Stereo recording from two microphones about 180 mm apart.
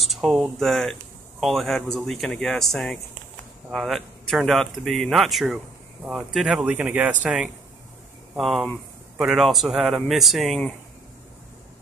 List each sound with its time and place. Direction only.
0.1 s speech: centre (ahead or behind)